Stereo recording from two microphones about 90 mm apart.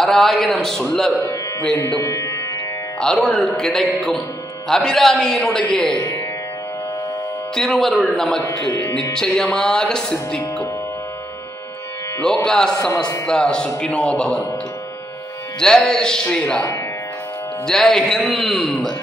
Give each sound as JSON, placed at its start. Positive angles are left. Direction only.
{"t": 0.0, "sound": "speech", "side_deg": 0}
{"t": 2.0, "sound": "speech", "side_deg": 30}
{"t": 3.0, "sound": "speech", "side_deg": 5}
{"t": 5.7, "sound": "music", "side_deg": 5}
{"t": 5.9, "sound": "speech", "side_deg": 45}
{"t": 7.5, "sound": "speech", "side_deg": 5}
{"t": 9.1, "sound": "music", "side_deg": 5}
{"t": 12.2, "sound": "music", "side_deg": 10}
{"t": 15.6, "sound": "music", "side_deg": 5}
{"t": 17.6, "sound": "music", "side_deg": 5}
{"t": 18.4, "sound": "speech", "side_deg": 0}